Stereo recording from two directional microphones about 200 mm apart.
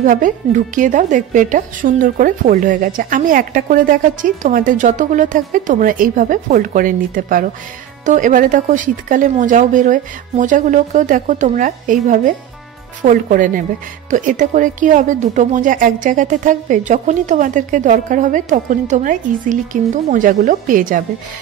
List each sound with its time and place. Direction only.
0.0 s speech: 40° right (ahead or behind)